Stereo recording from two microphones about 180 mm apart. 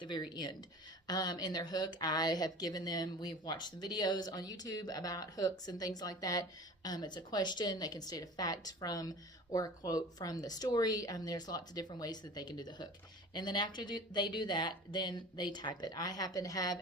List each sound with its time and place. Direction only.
0.0 s speech: 25° left (ahead or behind)